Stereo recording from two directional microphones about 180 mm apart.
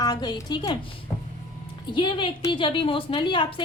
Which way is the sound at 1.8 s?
25° left (ahead or behind).